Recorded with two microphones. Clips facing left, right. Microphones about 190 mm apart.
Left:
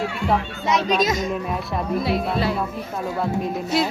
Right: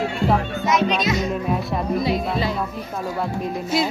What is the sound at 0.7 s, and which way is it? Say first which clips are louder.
Speech: left 1 dB; 40° left (ahead or behind).